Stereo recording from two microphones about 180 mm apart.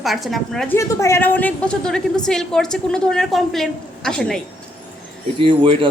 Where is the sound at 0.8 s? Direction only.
15° left (ahead or behind).